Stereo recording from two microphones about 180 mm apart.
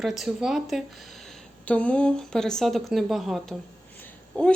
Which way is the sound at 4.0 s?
10° left (ahead or behind).